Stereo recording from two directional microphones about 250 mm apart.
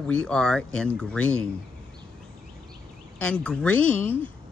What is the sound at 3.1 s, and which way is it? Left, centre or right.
Speech, centre.